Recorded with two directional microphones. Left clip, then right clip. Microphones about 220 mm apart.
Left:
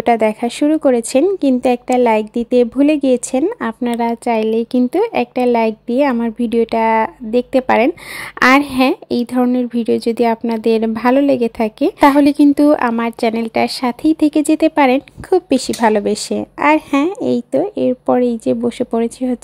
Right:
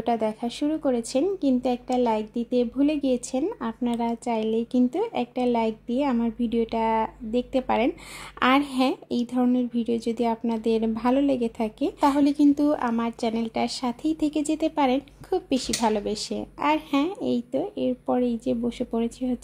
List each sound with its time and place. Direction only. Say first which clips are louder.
0.0 s a woman's voice: left 12 dB; 30° left (ahead or behind)